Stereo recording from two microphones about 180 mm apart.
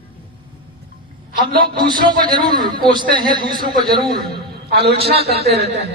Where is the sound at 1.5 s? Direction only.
55° right (ahead or behind).